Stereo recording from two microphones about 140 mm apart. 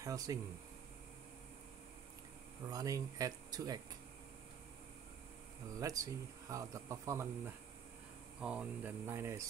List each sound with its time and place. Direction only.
0.0 s speech: 25° right (ahead or behind)
2.7 s speech: 25° right (ahead or behind)
5.8 s speech: 25° right (ahead or behind)
8.4 s speech: 5° right (ahead or behind)